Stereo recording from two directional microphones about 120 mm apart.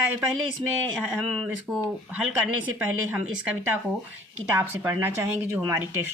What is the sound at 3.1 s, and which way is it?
A woman's voice, 15° right (ahead or behind).